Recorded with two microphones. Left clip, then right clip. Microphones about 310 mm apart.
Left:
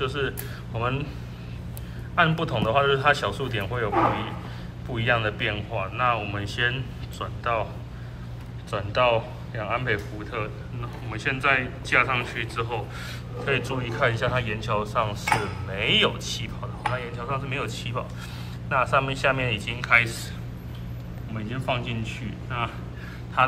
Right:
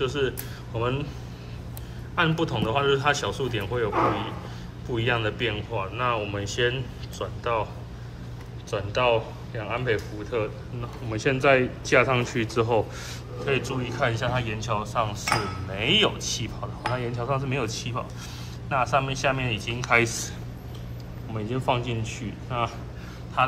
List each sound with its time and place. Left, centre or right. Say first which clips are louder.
0.0 s speech: right 1 dB; centre
2.1 s speech: left 2 dB; centre
8.6 s speech: left 1 dB; centre
21.3 s speech: right 3 dB; centre